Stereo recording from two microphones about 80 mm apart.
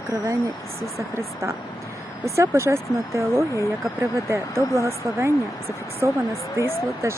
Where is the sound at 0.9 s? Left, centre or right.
Right.